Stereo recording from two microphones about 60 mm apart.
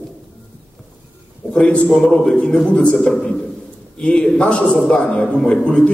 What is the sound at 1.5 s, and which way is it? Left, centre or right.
A man's voice, centre.